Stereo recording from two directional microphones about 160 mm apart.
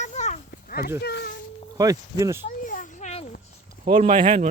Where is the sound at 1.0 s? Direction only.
90° left.